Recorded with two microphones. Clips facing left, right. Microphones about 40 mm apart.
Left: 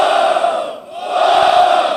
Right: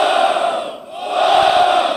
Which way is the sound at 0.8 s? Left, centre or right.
Centre.